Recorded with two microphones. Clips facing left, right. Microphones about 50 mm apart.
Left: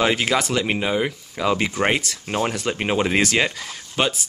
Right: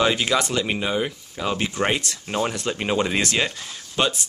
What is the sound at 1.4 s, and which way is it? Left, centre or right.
Speech, left.